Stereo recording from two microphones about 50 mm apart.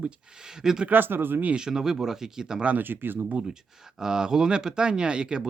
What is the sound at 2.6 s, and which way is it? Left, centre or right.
Speech, right.